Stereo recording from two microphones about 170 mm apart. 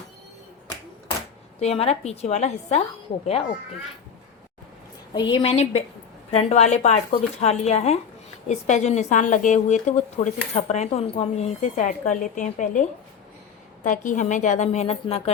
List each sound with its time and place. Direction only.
1.5 s speech: 35° left (ahead or behind)
5.1 s speech: 25° left (ahead or behind)